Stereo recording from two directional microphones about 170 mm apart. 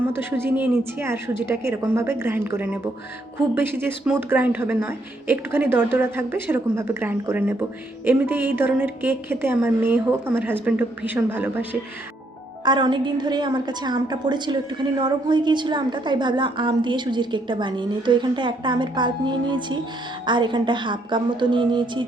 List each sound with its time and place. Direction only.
0.2 s speech: 10° right (ahead or behind)
12.6 s a woman's voice: 25° right (ahead or behind)